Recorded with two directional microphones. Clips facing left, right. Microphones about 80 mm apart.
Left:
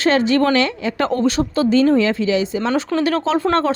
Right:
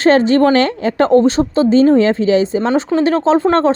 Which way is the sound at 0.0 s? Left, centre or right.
Right.